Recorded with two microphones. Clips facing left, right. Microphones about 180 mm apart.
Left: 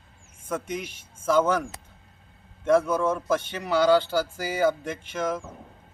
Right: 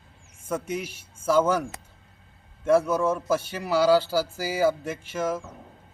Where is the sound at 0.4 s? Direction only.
5° right (ahead or behind).